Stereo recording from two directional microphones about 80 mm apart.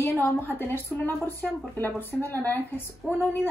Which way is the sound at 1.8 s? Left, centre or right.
Left.